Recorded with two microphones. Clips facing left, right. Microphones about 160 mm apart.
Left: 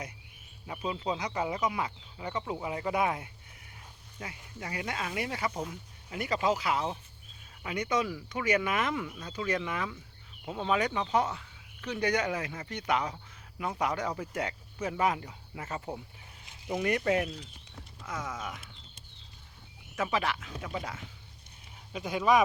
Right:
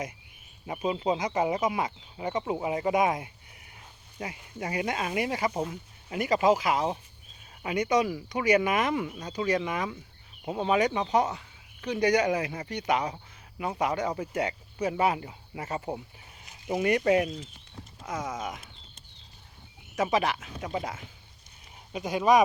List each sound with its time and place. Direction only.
0.7 s speech: 15° right (ahead or behind)
18.3 s speech: 40° right (ahead or behind)
20.0 s speech: 15° right (ahead or behind)
20.6 s speech: 30° right (ahead or behind)
22.1 s speech: 45° right (ahead or behind)